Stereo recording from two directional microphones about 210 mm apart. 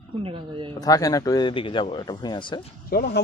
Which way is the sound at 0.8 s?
15° left (ahead or behind).